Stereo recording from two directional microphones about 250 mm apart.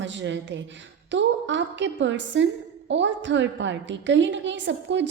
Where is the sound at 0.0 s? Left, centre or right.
Right.